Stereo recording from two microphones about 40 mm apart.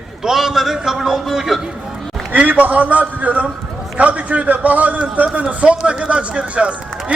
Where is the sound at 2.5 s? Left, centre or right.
Right.